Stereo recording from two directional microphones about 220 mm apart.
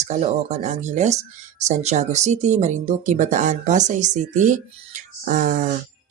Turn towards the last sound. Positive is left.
turn(degrees=-35)  # may be behind; listen again after turning